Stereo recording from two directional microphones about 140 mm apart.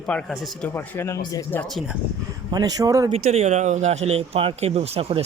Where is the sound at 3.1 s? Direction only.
50° right (ahead or behind).